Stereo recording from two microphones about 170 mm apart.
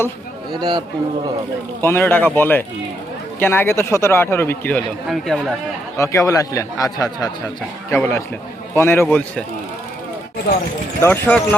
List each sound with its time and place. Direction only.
0.5 s a man's voice: 25° right (ahead or behind)
1.8 s speech: 15° left (ahead or behind)
5.0 s speech: centre (ahead or behind)
6.0 s a man's voice: 15° left (ahead or behind)
11.0 s speech: 10° left (ahead or behind)